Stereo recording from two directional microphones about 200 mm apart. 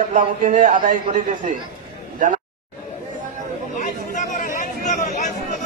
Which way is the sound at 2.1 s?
40° right (ahead or behind).